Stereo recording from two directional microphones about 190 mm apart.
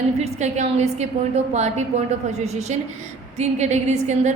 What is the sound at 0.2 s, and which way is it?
A woman's voice, 35° right (ahead or behind).